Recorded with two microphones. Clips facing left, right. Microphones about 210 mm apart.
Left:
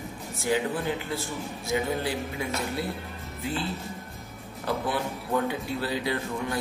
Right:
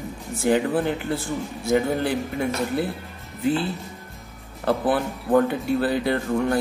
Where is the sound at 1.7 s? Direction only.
55° right (ahead or behind).